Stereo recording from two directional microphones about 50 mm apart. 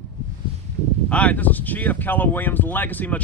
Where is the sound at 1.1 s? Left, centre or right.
Left.